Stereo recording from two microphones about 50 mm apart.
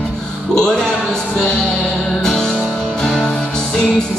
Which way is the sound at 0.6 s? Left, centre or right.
Centre.